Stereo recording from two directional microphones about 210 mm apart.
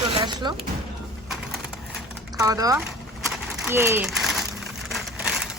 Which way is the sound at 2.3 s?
15° right (ahead or behind).